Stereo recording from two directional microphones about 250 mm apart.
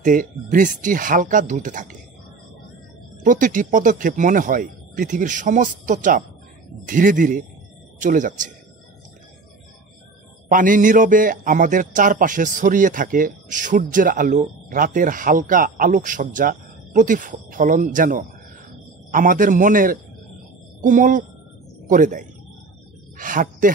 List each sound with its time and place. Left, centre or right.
0.0 s a man's voice: right
3.3 s a man's voice: right
10.5 s a man's voice: right